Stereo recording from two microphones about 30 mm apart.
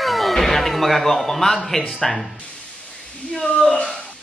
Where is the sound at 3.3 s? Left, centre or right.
Left.